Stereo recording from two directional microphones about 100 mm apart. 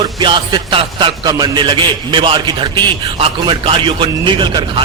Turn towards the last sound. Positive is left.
turn(degrees=-55)  # may be behind; listen again after turning